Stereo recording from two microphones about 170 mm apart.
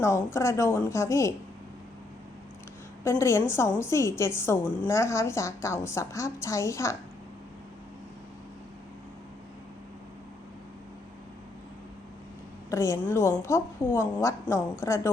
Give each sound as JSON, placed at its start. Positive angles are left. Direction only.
{"t": 0.0, "sound": "a woman's voice", "side_deg": 15}
{"t": 3.0, "sound": "a woman's voice", "side_deg": 15}
{"t": 12.7, "sound": "a woman's voice", "side_deg": 15}